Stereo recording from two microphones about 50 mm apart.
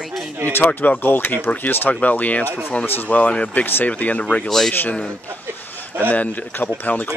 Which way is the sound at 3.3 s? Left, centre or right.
Left.